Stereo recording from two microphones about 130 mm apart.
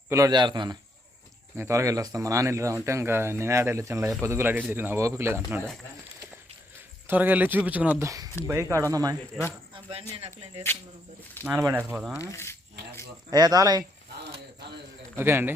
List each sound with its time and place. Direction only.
0.3 s a man's voice: 35° right (ahead or behind)
1.5 s speech: 20° right (ahead or behind)
7.1 s speech: 15° right (ahead or behind)
8.0 s speech: 25° right (ahead or behind)
9.7 s speech: 45° right (ahead or behind)
11.6 s speech: 15° right (ahead or behind)
11.9 s speech: 5° right (ahead or behind)
12.2 s speech: 20° left (ahead or behind)
13.3 s speech: 30° right (ahead or behind)
15.1 s a man's voice: 15° right (ahead or behind)